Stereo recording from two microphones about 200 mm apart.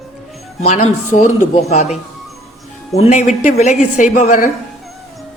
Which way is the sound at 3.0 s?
35° left (ahead or behind).